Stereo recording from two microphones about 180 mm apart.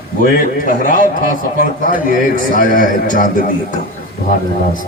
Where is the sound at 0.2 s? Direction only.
50° left (ahead or behind).